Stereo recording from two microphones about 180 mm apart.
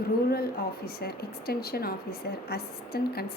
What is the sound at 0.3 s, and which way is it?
A woman's voice, 60° left (ahead or behind).